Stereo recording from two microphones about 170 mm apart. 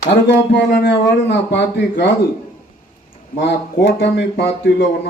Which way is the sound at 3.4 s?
80° left.